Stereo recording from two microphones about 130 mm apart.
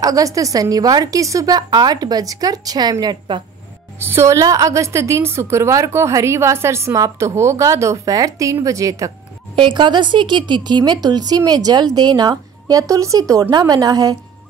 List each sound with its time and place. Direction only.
0.0 s a woman's voice: 25° right (ahead or behind)
4.0 s a woman's voice: 20° right (ahead or behind)
9.6 s speech: 35° right (ahead or behind)